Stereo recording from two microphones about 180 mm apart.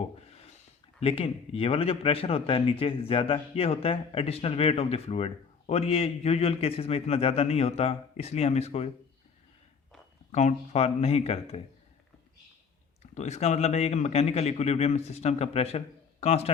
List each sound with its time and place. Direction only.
0.9 s speech: 30° left (ahead or behind)
10.3 s speech: 40° left (ahead or behind)
13.0 s speech: 40° left (ahead or behind)